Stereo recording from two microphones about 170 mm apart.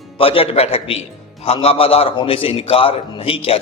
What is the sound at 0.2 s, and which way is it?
A man's voice, 35° left (ahead or behind).